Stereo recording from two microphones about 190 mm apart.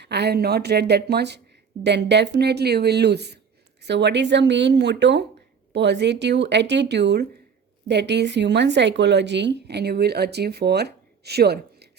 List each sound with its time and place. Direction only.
0.0 s speech: 60° right (ahead or behind)